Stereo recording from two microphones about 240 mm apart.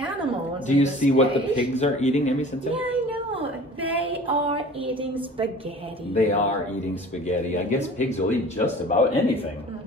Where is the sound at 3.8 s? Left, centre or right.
Centre.